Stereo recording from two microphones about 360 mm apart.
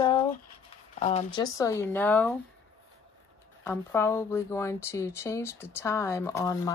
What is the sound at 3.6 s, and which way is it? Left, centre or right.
Speech, centre.